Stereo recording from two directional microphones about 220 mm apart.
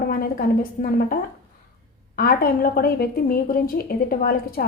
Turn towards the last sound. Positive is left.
turn(degrees=40)  # may be behind; listen again after turning